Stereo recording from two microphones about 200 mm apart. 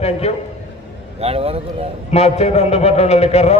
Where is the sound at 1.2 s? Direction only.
30° right (ahead or behind).